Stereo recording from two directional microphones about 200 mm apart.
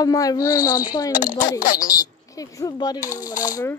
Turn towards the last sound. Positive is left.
turn(degrees=15)  # may be behind; listen again after turning